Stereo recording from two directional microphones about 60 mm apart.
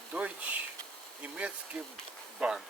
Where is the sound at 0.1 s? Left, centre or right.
Right.